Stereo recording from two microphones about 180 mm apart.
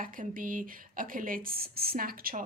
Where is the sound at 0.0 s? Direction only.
50° right (ahead or behind).